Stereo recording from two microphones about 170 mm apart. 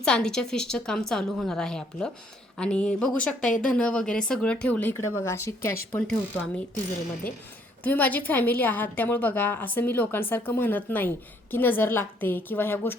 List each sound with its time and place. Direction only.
0.0 s a woman's voice: 5° left (ahead or behind)
6.0 s a woman's voice: 5° left (ahead or behind)
7.9 s a woman's voice: 10° left (ahead or behind)